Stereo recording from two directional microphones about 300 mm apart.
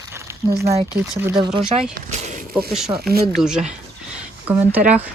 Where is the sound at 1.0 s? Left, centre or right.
Centre.